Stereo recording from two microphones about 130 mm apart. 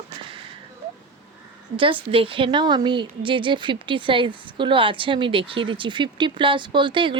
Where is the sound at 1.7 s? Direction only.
40° right (ahead or behind).